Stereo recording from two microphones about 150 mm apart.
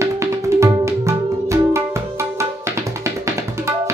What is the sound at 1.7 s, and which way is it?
Music, 20° right (ahead or behind).